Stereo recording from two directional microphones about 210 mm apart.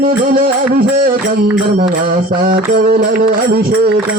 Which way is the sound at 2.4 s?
40° right (ahead or behind).